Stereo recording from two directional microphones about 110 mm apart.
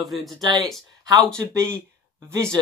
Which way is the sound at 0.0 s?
Centre (ahead or behind).